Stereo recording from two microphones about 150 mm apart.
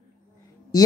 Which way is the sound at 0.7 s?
25° left (ahead or behind).